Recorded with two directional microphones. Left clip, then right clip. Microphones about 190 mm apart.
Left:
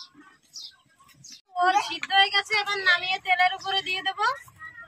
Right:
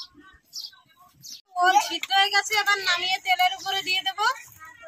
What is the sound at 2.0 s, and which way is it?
Speech, 5° left (ahead or behind).